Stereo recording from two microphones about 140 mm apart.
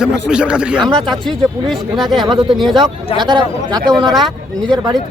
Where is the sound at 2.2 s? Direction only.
35° right (ahead or behind).